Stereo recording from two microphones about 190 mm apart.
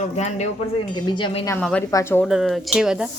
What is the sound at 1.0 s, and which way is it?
Speech, 25° left (ahead or behind).